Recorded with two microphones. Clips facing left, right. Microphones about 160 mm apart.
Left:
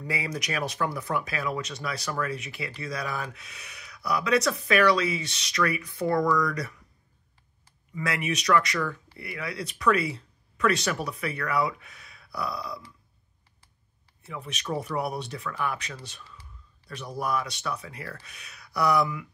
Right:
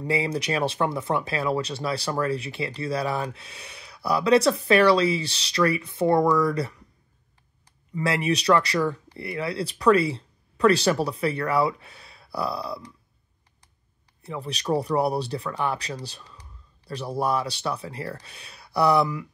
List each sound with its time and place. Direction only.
0.0 s speech: 25° right (ahead or behind)
7.9 s speech: 30° right (ahead or behind)
14.2 s speech: 35° right (ahead or behind)